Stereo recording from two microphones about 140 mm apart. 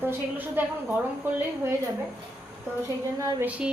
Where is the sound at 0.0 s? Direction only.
15° right (ahead or behind).